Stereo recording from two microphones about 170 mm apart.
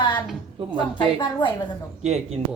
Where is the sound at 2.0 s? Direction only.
40° right (ahead or behind).